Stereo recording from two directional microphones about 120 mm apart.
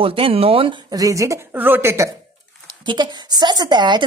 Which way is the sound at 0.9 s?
30° right (ahead or behind).